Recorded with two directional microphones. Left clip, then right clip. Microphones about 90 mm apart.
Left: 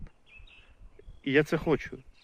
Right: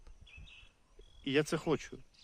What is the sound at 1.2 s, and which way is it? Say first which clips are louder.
Speech: left 7 dB; 15° right (ahead or behind).